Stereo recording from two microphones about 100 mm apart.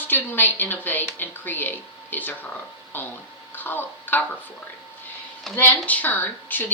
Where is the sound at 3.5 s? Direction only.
20° left (ahead or behind).